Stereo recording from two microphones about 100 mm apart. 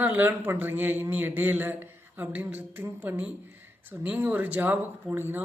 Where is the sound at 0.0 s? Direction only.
20° right (ahead or behind).